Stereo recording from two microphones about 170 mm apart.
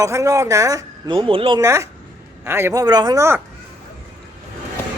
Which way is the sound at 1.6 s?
15° right (ahead or behind).